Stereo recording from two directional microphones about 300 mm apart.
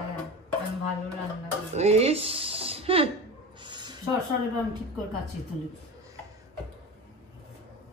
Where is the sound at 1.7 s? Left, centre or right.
Right.